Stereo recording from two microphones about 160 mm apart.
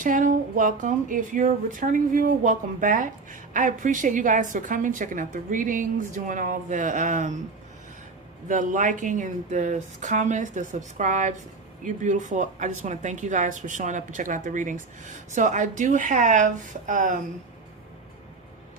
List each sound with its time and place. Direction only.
0.0 s speech: 55° right (ahead or behind)
8.4 s speech: 55° right (ahead or behind)